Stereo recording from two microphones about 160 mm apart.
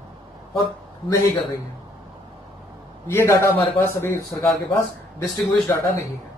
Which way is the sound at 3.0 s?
15° left (ahead or behind).